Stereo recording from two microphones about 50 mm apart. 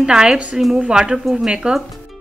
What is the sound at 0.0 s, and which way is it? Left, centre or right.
A woman's voice, centre.